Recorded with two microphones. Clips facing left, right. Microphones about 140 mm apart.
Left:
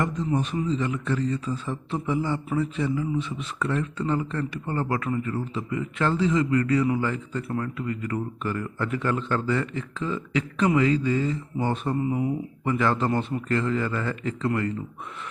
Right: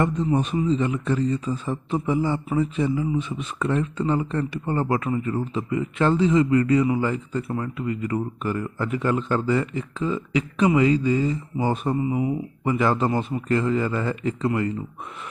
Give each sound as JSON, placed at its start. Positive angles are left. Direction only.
{"t": 0.0, "sound": "a man's voice", "side_deg": -25}